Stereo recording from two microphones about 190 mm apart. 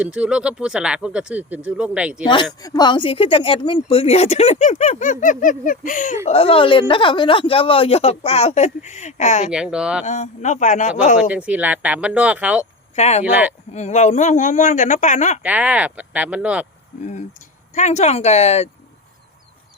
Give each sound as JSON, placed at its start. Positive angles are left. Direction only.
{"t": 0.0, "sound": "speech", "side_deg": -5}
{"t": 2.2, "sound": "speech", "side_deg": 25}
{"t": 6.2, "sound": "speech", "side_deg": 30}
{"t": 9.5, "sound": "speech", "side_deg": -5}
{"t": 10.1, "sound": "speech", "side_deg": 40}
{"t": 11.2, "sound": "speech", "side_deg": -5}
{"t": 13.0, "sound": "speech", "side_deg": 35}
{"t": 15.4, "sound": "speech", "side_deg": -5}
{"t": 17.0, "sound": "speech", "side_deg": 40}